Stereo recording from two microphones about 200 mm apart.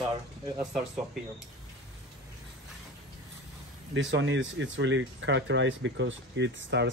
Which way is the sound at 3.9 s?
65° right (ahead or behind).